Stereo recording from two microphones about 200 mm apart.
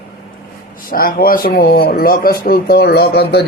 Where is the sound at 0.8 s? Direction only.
45° left (ahead or behind).